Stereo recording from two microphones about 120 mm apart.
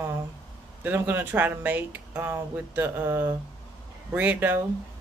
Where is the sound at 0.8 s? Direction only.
15° right (ahead or behind).